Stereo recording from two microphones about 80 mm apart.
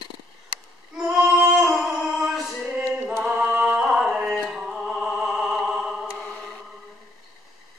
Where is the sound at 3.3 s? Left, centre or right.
Centre.